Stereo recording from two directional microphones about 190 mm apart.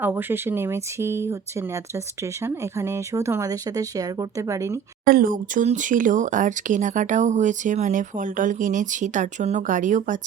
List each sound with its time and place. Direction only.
0.0 s speech: 10° right (ahead or behind)
5.0 s speech: 50° right (ahead or behind)